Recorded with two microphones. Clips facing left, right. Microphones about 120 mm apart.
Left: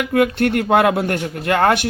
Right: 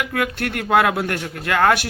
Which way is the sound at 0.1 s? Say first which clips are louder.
Left 8 dB; 25° left (ahead or behind).